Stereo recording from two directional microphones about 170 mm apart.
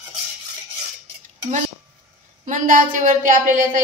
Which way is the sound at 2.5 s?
50° right (ahead or behind).